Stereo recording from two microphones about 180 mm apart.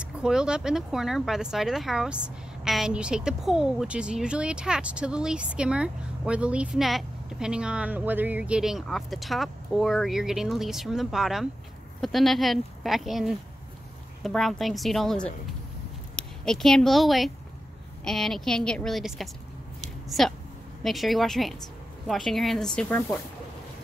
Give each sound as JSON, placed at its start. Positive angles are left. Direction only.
{"t": 0.0, "sound": "speech", "side_deg": -5}